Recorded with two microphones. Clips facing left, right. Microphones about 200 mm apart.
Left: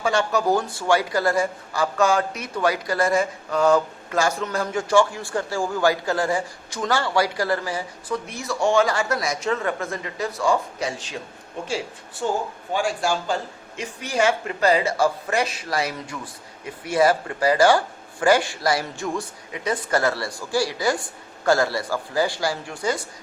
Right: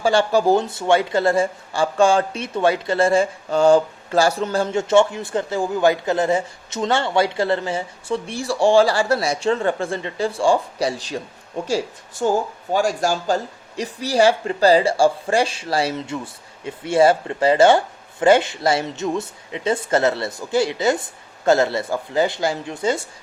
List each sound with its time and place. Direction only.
0.0 s speech: 30° right (ahead or behind)